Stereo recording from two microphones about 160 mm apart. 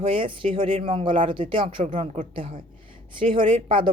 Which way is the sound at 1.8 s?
50° right (ahead or behind).